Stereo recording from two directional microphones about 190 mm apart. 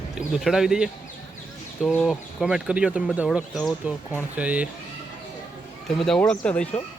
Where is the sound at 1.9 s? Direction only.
Centre (ahead or behind).